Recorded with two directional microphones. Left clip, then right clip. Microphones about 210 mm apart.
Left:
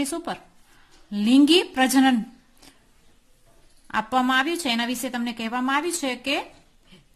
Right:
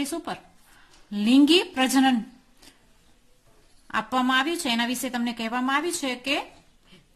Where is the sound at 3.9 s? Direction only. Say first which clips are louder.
Left 2 dB; 5° left (ahead or behind).